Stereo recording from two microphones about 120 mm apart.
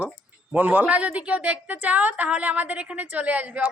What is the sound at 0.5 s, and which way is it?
A woman's voice, 15° right (ahead or behind).